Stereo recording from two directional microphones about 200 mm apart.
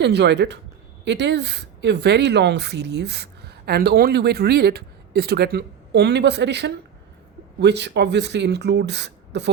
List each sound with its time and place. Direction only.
0.0 s speech: 60° right (ahead or behind)